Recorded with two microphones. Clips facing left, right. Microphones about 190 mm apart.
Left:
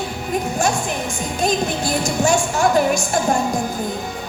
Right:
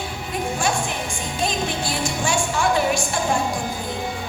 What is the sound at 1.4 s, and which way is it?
A woman's voice, 40° left (ahead or behind).